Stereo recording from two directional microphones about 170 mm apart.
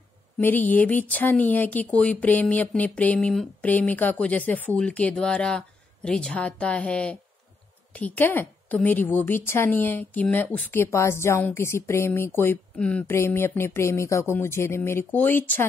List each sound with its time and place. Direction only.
0.4 s a woman's voice: 10° left (ahead or behind)